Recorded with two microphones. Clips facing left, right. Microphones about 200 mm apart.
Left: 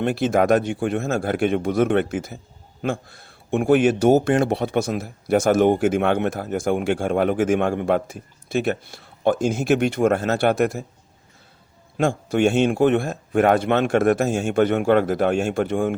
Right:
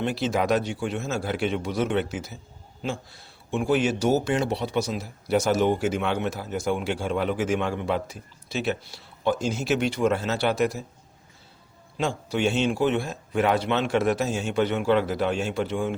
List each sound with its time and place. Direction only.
0.0 s speech: 55° left (ahead or behind)
11.9 s speech: 50° left (ahead or behind)